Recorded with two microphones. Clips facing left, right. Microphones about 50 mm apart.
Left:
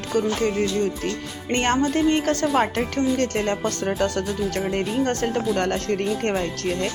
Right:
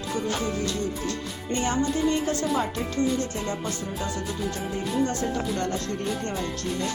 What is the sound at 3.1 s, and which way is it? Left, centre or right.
Speech, left.